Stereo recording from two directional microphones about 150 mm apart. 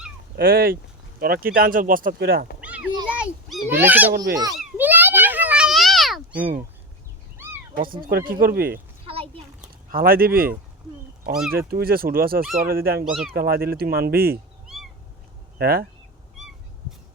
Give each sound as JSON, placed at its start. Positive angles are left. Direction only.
{"t": 0.3, "sound": "speech", "side_deg": -80}
{"t": 2.6, "sound": "children playing", "side_deg": -10}
{"t": 4.8, "sound": "a sound", "side_deg": -10}
{"t": 8.1, "sound": "speech", "side_deg": -75}
{"t": 9.9, "sound": "speech", "side_deg": -80}
{"t": 11.5, "sound": "speech", "side_deg": -85}
{"t": 15.5, "sound": "speech", "side_deg": -90}